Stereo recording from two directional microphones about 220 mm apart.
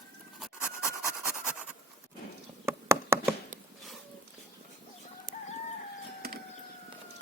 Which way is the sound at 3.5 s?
35° right (ahead or behind).